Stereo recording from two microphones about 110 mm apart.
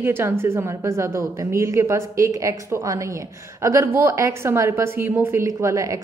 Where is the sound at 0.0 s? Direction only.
20° right (ahead or behind).